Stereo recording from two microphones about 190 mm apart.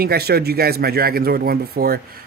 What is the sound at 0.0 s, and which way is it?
Speech, 55° right (ahead or behind).